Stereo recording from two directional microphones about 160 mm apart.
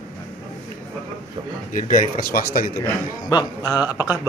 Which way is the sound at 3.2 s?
25° left (ahead or behind).